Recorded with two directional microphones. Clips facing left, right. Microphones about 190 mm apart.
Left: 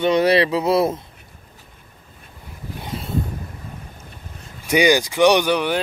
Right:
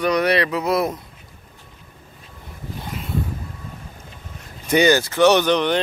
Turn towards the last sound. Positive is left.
turn(degrees=10)  # may be behind; listen again after turning